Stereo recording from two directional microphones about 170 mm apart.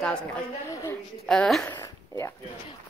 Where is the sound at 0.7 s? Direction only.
20° left (ahead or behind).